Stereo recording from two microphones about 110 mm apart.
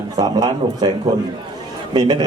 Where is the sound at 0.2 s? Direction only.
40° right (ahead or behind).